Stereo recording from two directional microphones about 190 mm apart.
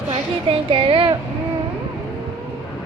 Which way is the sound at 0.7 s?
30° right (ahead or behind).